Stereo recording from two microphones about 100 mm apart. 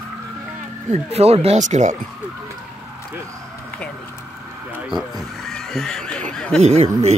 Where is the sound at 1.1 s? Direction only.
90° right.